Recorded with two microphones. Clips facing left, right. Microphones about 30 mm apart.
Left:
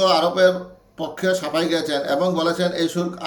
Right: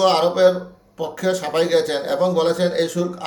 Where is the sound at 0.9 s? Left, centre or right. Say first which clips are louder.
Even; left.